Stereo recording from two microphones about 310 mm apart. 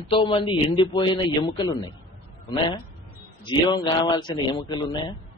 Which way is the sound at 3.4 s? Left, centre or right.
Centre.